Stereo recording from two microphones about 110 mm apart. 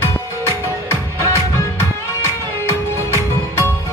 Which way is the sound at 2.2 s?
25° left (ahead or behind).